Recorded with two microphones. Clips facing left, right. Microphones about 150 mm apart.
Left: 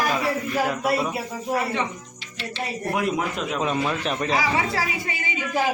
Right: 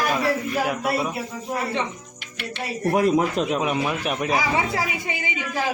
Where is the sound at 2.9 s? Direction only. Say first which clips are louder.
Right 6 dB; 40° right (ahead or behind).